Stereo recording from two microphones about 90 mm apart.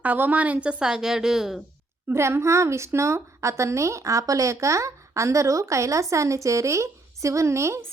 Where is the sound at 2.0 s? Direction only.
30° right (ahead or behind).